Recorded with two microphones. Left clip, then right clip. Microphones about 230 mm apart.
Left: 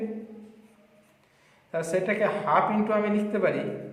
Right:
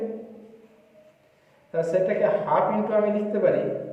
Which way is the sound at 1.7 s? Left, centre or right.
Centre.